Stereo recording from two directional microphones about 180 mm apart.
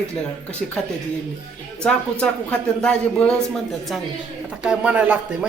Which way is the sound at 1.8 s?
5° left (ahead or behind).